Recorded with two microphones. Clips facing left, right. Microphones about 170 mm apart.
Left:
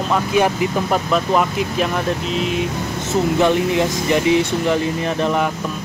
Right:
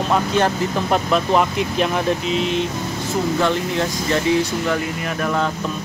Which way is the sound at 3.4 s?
15° left (ahead or behind).